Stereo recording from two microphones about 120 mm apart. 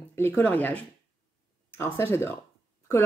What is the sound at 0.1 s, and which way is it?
Speech, 20° left (ahead or behind).